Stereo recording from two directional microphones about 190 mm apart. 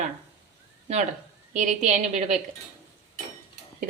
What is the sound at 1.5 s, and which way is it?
Speech, 40° right (ahead or behind).